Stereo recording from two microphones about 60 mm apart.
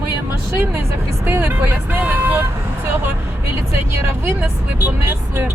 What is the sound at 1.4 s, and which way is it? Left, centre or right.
Speech, right.